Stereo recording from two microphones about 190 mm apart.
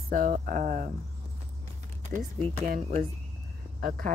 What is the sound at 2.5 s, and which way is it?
Speech, 40° right (ahead or behind).